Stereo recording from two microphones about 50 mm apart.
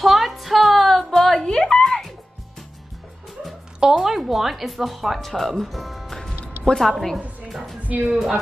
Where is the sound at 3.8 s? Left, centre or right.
Centre.